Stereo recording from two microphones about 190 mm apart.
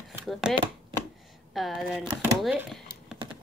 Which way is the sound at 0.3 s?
Centre (ahead or behind).